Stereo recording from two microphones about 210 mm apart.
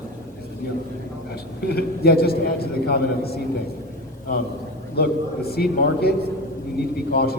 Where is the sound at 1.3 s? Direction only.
50° left (ahead or behind).